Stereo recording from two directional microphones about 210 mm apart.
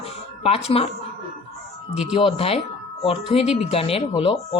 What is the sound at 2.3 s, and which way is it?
Speech, 30° left (ahead or behind).